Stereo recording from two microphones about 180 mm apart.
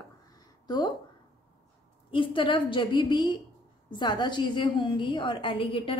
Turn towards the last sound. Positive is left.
turn(degrees=30)  # may be behind; listen again after turning